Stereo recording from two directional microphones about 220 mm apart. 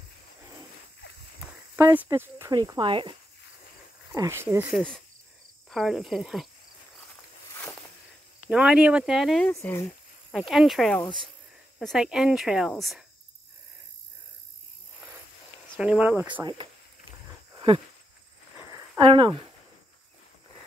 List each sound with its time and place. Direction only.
1.4 s speech: 5° right (ahead or behind)
8.5 s speech: 5° right (ahead or behind)
9.5 s speech: 10° left (ahead or behind)
15.7 s speech: 5° right (ahead or behind)
17.6 s a sound: 25° right (ahead or behind)